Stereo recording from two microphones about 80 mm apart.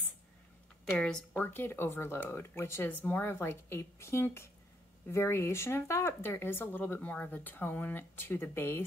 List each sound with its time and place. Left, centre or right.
0.9 s speech: centre
1.4 s speech: left